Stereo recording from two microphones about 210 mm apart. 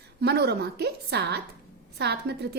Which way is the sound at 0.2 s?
50° right (ahead or behind).